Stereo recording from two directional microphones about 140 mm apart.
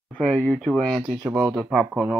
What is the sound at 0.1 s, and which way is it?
Speech, 10° left (ahead or behind).